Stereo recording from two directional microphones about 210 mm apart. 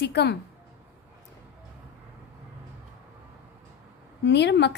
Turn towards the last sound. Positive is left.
turn(degrees=55)  # may be behind; listen again after turning